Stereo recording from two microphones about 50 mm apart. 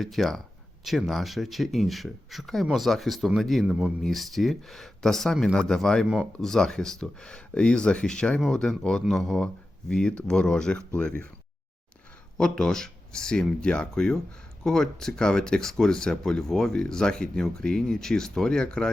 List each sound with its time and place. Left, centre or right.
0.0 s speech: centre; by 11.3 s left
12.4 s speech: centre